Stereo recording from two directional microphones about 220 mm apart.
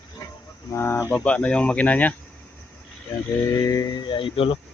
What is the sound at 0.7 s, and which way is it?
Speech, 10° left (ahead or behind).